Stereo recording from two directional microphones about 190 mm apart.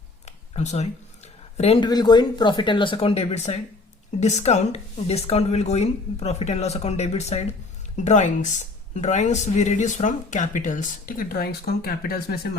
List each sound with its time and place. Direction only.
0.3 s speech: 35° left (ahead or behind); by 12.5 s 50° left (ahead or behind)